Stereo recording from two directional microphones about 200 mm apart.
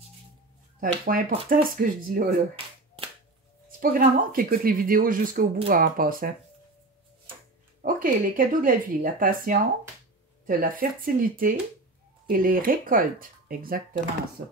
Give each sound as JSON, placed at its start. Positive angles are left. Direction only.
{"t": 0.7, "sound": "speech", "side_deg": -45}
{"t": 3.8, "sound": "speech", "side_deg": -45}
{"t": 7.8, "sound": "speech", "side_deg": -45}